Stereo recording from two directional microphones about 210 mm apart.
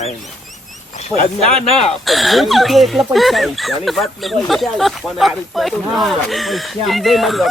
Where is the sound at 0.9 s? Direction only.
30° left (ahead or behind).